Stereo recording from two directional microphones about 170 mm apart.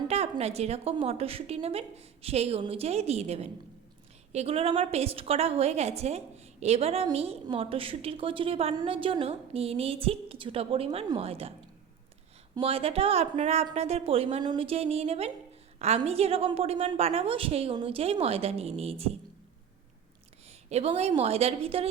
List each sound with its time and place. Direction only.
0.1 s a woman's voice: 40° right (ahead or behind)
12.5 s a woman's voice: 35° right (ahead or behind)
20.5 s a woman's voice: 40° right (ahead or behind)